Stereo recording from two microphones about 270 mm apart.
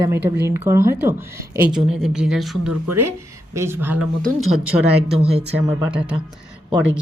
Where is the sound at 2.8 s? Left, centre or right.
Right.